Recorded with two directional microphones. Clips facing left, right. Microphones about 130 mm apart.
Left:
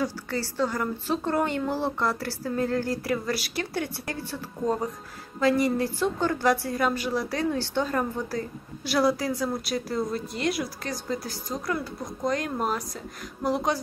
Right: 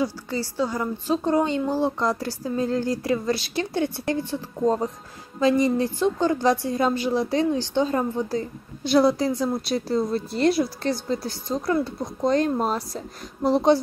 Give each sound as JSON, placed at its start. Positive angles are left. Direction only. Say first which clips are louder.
{"t": 0.0, "sound": "a woman's voice", "louder": "right 3 dB", "side_deg": -15}